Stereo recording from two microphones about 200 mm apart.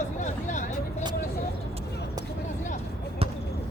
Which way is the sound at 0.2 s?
40° left (ahead or behind).